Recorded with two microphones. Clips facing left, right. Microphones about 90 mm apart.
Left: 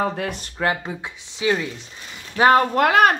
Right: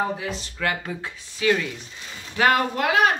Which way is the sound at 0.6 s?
25° left (ahead or behind).